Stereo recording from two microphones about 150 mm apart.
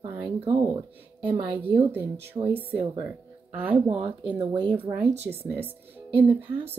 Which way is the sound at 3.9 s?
35° right (ahead or behind).